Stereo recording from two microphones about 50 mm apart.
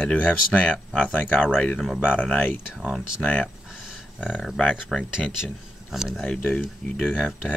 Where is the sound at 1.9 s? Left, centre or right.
Left.